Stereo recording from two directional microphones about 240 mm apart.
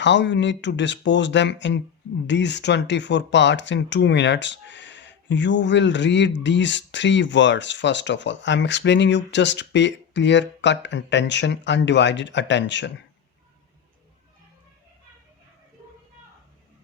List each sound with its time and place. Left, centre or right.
0.0 s speech: left